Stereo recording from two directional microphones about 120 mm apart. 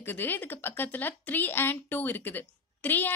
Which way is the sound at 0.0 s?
15° left (ahead or behind).